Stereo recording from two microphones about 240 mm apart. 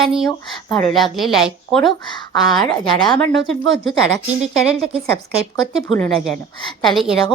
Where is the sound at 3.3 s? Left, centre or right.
Right.